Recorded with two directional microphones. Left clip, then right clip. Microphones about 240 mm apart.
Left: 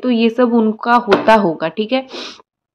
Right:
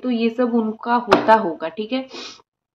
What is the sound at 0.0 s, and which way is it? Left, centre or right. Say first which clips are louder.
A woman's voice: left 6 dB; left.